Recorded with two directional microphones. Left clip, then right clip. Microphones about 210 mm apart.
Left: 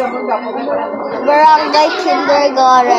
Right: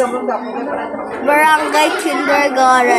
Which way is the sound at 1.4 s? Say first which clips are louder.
Left 4 dB; 45° right (ahead or behind).